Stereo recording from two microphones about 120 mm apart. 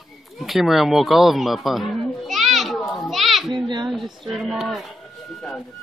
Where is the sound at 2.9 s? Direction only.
Centre (ahead or behind).